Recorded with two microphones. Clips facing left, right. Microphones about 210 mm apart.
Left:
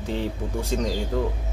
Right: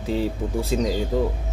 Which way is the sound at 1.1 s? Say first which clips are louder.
Right 3 dB; 10° right (ahead or behind).